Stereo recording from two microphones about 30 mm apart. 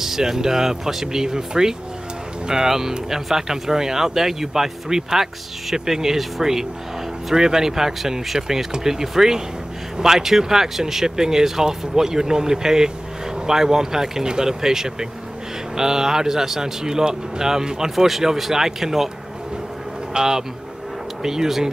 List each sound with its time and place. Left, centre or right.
0.0 s speech: centre
17.9 s speech: centre
20.2 s speech: right